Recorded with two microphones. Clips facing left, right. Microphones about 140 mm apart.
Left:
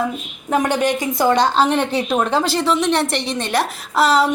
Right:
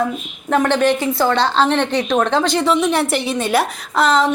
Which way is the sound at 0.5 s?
15° left (ahead or behind).